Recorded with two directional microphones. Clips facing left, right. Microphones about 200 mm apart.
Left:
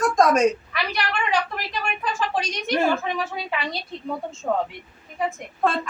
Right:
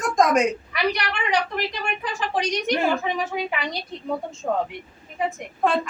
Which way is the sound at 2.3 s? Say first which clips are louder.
Right 3 dB; 15° right (ahead or behind).